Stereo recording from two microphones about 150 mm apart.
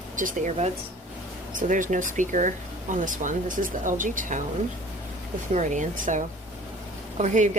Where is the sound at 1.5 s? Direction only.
60° right (ahead or behind).